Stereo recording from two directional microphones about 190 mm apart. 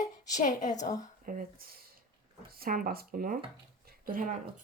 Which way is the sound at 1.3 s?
45° right (ahead or behind).